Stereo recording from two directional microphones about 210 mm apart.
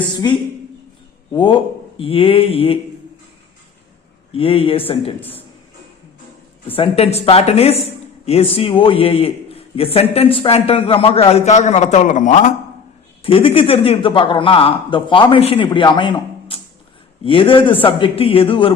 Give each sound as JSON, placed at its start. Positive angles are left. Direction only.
{"t": 1.3, "sound": "a man's voice", "side_deg": 20}
{"t": 4.3, "sound": "a man's voice", "side_deg": 25}
{"t": 6.7, "sound": "a man's voice", "side_deg": 25}
{"t": 13.2, "sound": "a man's voice", "side_deg": 25}